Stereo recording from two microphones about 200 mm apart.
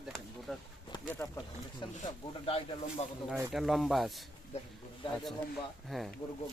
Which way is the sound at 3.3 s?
5° right (ahead or behind).